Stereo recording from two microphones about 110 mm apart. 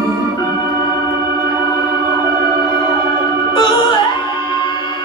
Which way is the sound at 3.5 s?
45° left (ahead or behind).